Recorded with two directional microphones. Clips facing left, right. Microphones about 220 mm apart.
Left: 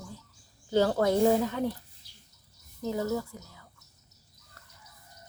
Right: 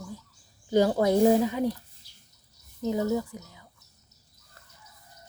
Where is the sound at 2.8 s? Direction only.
20° right (ahead or behind).